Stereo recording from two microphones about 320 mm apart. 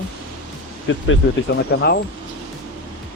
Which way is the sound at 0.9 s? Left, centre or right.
Left.